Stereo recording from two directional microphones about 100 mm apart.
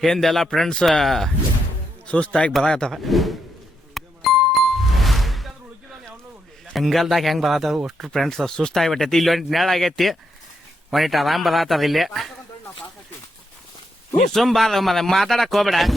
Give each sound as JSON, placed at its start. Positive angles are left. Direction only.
{"t": 0.0, "sound": "a man's voice", "side_deg": 5}
{"t": 3.9, "sound": "music", "side_deg": 0}
{"t": 6.7, "sound": "speech", "side_deg": 0}
{"t": 14.2, "sound": "speech", "side_deg": 5}